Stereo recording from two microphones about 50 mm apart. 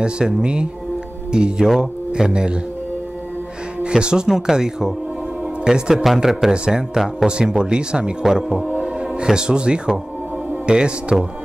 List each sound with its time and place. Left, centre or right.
0.0 s speech: centre
3.8 s a man's voice: centre